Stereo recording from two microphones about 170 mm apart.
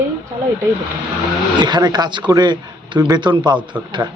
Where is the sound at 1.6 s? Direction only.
25° right (ahead or behind).